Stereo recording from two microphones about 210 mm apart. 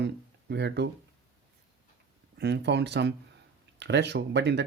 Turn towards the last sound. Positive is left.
turn(degrees=-55)  # may be behind; listen again after turning